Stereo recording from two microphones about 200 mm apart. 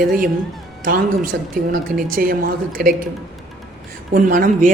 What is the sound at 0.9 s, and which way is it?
A woman's voice, 45° right (ahead or behind).